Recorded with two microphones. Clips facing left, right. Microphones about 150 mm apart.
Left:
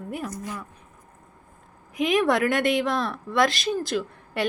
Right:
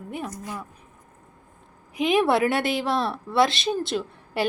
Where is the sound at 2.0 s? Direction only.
30° right (ahead or behind).